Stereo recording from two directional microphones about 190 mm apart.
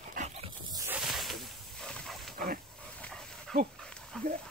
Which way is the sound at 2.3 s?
50° right (ahead or behind).